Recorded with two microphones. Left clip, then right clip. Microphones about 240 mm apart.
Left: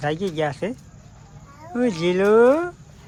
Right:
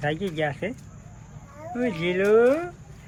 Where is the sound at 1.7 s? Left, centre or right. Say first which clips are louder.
Left 4 dB; centre.